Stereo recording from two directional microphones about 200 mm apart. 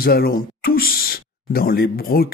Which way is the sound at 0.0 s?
50° left (ahead or behind).